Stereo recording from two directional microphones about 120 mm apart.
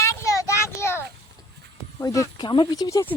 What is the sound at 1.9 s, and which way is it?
Speech, 30° left (ahead or behind).